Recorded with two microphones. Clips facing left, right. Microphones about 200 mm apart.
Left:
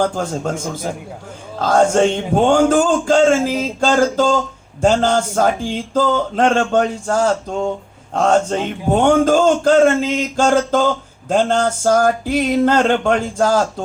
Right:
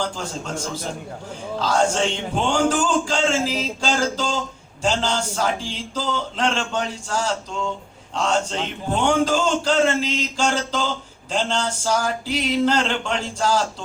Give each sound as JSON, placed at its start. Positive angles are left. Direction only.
{"t": 0.0, "sound": "speech", "side_deg": 55}